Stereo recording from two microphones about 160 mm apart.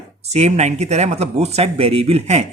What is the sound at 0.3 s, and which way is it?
Speech, 45° right (ahead or behind).